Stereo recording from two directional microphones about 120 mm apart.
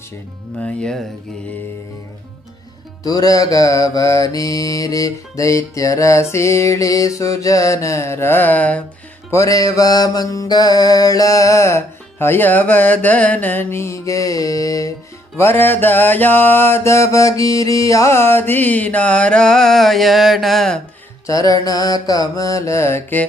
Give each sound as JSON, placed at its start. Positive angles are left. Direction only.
{"t": 0.6, "sound": "mantra", "side_deg": 5}
{"t": 3.0, "sound": "mantra", "side_deg": 30}
{"t": 9.3, "sound": "mantra", "side_deg": 25}
{"t": 21.2, "sound": "mantra", "side_deg": 30}